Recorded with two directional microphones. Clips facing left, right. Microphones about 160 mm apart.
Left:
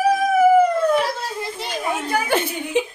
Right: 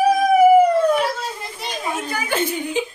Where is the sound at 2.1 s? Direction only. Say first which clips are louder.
Left 3 dB; 60° left (ahead or behind).